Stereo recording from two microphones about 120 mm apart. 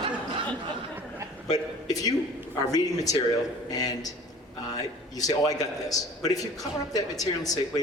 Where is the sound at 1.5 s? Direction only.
30° left (ahead or behind).